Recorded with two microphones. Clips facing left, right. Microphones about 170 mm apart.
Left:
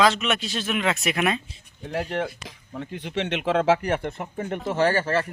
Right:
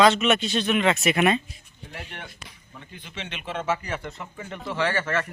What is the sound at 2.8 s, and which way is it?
Speech, 70° left (ahead or behind).